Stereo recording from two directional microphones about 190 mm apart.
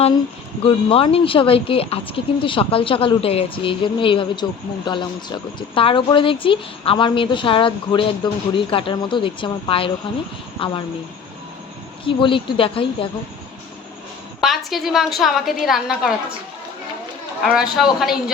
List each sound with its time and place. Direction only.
0.6 s speech: 30° left (ahead or behind)
12.0 s speech: 25° left (ahead or behind)
14.4 s a woman's voice: centre (ahead or behind)
17.4 s a woman's voice: centre (ahead or behind)